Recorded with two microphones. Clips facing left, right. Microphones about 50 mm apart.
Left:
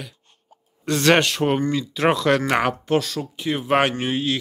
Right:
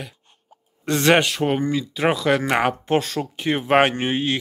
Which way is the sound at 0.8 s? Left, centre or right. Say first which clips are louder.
Even; right.